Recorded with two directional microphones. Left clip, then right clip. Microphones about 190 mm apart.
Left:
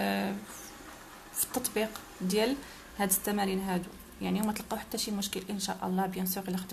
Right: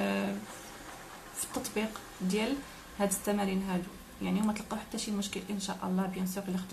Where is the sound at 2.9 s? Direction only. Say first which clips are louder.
Even; 45° left (ahead or behind).